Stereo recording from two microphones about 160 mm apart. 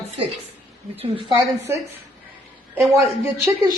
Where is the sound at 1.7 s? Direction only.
15° right (ahead or behind).